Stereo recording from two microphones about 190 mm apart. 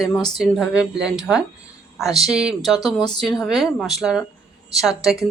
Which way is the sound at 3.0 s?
20° left (ahead or behind).